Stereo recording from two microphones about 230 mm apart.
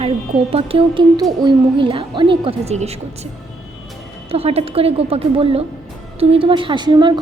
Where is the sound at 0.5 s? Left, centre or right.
Right.